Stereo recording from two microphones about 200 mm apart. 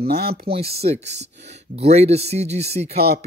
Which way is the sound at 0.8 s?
35° right (ahead or behind).